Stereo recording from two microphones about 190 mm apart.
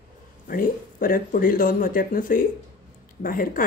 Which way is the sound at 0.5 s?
45° left (ahead or behind).